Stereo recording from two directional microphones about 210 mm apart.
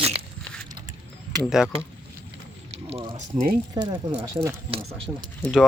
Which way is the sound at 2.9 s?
30° right (ahead or behind).